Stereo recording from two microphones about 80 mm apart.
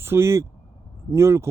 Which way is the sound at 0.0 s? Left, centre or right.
Right.